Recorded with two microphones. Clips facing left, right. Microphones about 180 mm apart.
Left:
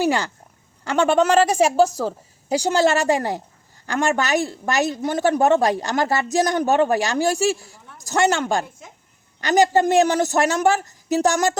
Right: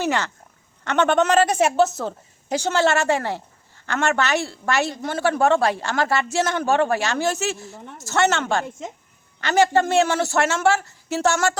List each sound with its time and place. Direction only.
0.0 s a man's voice: 10° left (ahead or behind)